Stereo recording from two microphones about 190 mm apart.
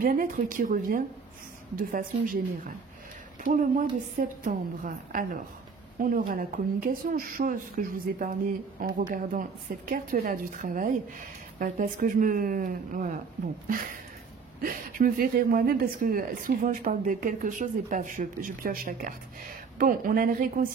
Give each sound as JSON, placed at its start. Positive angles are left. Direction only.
{"t": 0.0, "sound": "speech", "side_deg": -45}
{"t": 14.6, "sound": "speech", "side_deg": -45}